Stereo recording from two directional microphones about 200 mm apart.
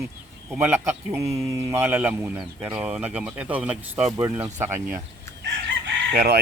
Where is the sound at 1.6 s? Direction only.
10° right (ahead or behind).